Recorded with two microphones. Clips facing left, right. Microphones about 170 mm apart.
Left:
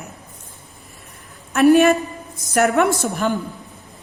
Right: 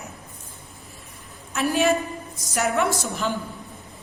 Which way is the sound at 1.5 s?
65° left (ahead or behind).